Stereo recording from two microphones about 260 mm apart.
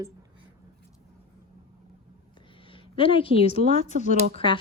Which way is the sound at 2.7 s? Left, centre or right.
Centre.